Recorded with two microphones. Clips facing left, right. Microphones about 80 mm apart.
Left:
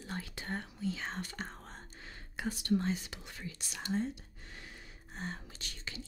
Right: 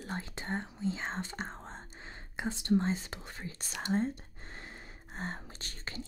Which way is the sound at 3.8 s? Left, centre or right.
Right.